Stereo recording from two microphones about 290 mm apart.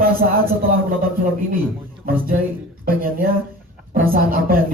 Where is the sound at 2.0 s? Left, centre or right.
Right.